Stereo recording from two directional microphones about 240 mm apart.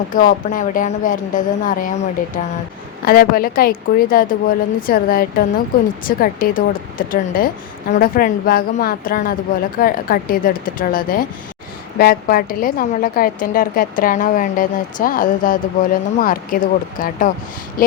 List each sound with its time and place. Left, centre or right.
0.1 s a woman's voice: left